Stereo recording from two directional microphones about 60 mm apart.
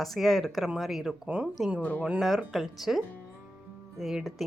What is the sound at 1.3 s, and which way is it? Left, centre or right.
Speech, centre.